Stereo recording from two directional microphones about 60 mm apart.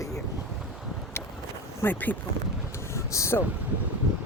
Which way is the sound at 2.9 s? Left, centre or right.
Left.